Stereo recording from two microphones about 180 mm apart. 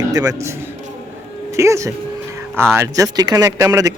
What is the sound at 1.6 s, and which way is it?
Speech, 15° right (ahead or behind).